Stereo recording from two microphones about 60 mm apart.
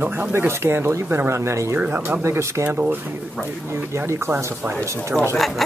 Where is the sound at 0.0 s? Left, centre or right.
Right.